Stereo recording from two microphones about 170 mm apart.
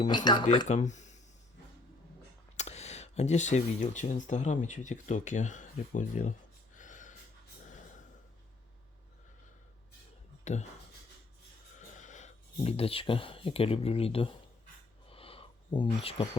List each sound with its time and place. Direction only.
0.1 s speech: 25° left (ahead or behind)
0.7 s a sound: 45° left (ahead or behind)
2.6 s speech: 40° left (ahead or behind)
6.7 s gasp: 50° left (ahead or behind)
7.6 s snort: 45° left (ahead or behind)
10.4 s speech: 45° left (ahead or behind)
11.9 s speech: 45° left (ahead or behind)
15.1 s a sound: 35° left (ahead or behind)